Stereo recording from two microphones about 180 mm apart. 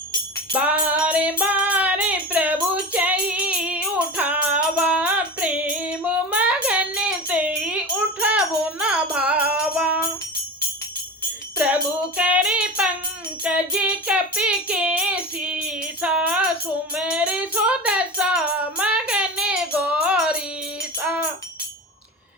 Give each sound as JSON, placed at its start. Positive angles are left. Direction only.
{"t": 0.5, "sound": "child singing", "side_deg": -5}
{"t": 11.5, "sound": "music", "side_deg": -5}